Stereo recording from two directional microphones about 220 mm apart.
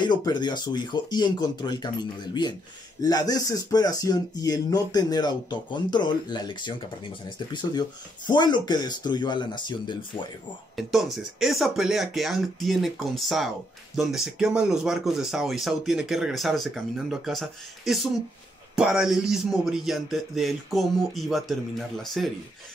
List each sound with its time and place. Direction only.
0.0 s speech: 20° left (ahead or behind)
8.3 s speech: 20° left (ahead or behind)
10.8 s speech: centre (ahead or behind)